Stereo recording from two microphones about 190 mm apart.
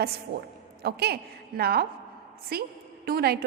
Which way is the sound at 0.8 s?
55° right (ahead or behind).